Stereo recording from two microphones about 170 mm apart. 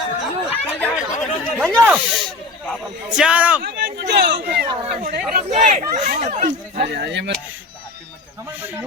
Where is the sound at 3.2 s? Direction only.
5° right (ahead or behind).